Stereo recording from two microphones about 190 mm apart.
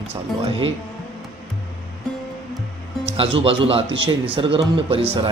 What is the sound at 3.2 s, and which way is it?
A man's voice, 30° right (ahead or behind).